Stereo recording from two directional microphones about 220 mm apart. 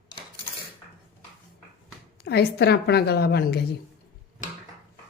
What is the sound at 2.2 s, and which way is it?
Speech, 50° left (ahead or behind).